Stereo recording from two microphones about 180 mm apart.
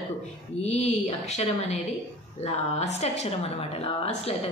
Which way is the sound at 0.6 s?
35° left (ahead or behind).